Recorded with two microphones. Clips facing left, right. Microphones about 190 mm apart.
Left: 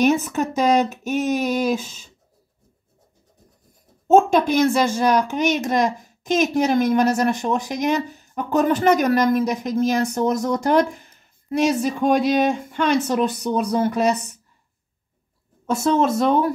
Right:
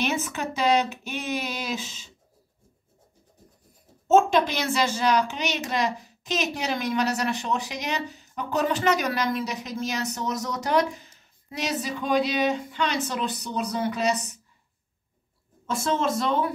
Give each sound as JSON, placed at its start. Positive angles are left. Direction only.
{"t": 0.0, "sound": "speech", "side_deg": 45}
{"t": 4.1, "sound": "speech", "side_deg": 50}
{"t": 15.7, "sound": "speech", "side_deg": 45}